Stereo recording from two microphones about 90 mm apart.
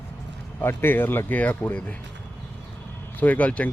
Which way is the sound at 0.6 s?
25° left (ahead or behind).